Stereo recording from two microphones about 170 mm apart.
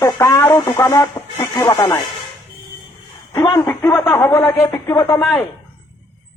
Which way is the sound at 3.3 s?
15° left (ahead or behind).